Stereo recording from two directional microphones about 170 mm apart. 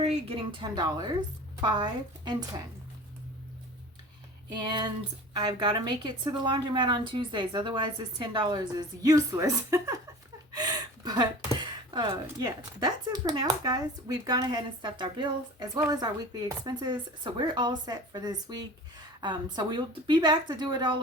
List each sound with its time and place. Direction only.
0.0 s speech: 35° right (ahead or behind)
4.5 s speech: 25° right (ahead or behind)